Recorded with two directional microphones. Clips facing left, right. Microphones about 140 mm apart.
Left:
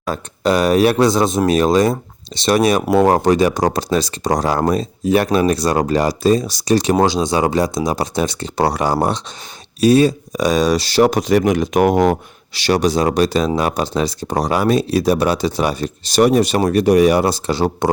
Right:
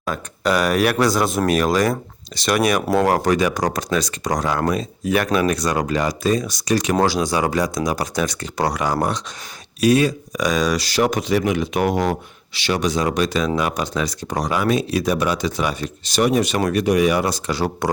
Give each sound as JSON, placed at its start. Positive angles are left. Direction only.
{"t": 0.0, "sound": "speech", "side_deg": 30}
{"t": 12.5, "sound": "speech", "side_deg": 40}